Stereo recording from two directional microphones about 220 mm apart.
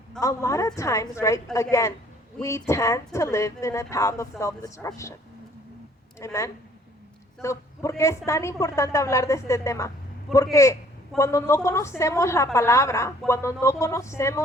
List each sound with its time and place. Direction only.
0.2 s a woman's voice: 15° left (ahead or behind)
6.1 s a woman's voice: 15° left (ahead or behind)